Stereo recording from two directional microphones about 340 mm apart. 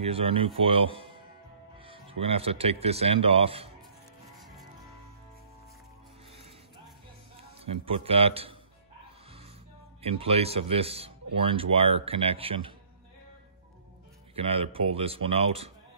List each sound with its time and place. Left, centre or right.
0.0 s speech: centre
7.6 s speech: centre
10.0 s speech: centre
14.3 s speech: centre